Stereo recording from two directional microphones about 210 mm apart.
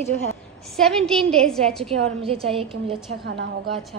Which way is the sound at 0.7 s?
Centre (ahead or behind).